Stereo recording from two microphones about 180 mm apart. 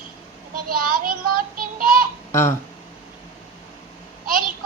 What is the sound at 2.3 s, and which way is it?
Speech, 15° left (ahead or behind).